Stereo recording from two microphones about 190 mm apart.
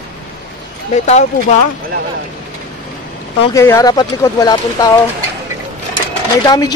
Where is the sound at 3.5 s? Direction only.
15° left (ahead or behind).